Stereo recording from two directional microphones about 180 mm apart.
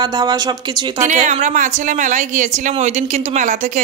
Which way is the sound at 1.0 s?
40° right (ahead or behind).